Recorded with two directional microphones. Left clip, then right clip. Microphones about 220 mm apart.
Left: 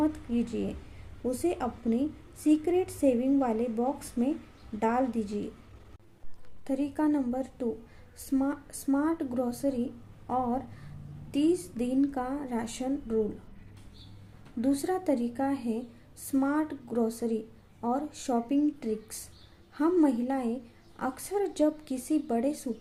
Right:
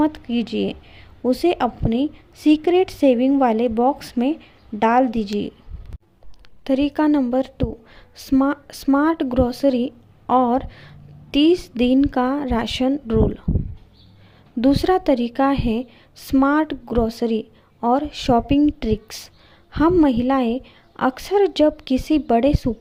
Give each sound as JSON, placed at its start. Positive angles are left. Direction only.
{"t": 0.0, "sound": "a woman's voice", "side_deg": -40}
{"t": 6.7, "sound": "a woman's voice", "side_deg": -40}
{"t": 14.6, "sound": "a woman's voice", "side_deg": -35}